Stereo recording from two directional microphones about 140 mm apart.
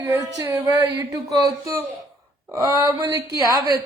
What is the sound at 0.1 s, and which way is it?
A woman's voice, 20° right (ahead or behind).